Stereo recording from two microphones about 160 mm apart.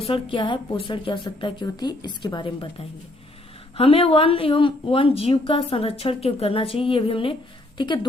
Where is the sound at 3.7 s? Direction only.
35° left (ahead or behind).